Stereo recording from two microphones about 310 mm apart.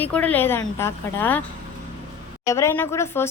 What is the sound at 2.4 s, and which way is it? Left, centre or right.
Speech, centre.